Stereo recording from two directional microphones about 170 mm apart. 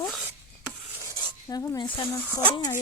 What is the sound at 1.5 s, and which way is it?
Speech, 20° left (ahead or behind).